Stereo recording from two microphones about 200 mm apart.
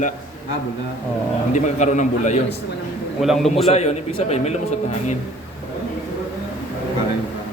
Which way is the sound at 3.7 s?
30° left (ahead or behind).